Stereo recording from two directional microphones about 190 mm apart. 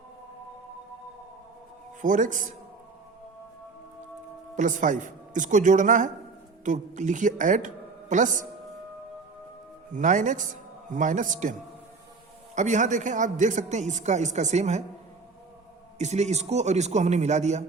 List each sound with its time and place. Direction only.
2.0 s speech: 45° right (ahead or behind)
4.5 s a woman's voice: 40° right (ahead or behind)
9.9 s a man's voice: 40° right (ahead or behind)
12.5 s a woman's voice: 40° right (ahead or behind)
16.0 s a woman's voice: 35° right (ahead or behind)